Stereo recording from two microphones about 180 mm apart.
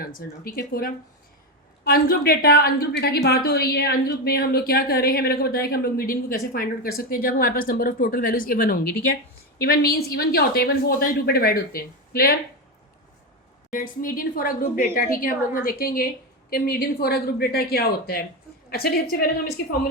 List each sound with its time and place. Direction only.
0.0 s a woman's voice: 55° left (ahead or behind)
13.7 s a woman's voice: 50° left (ahead or behind)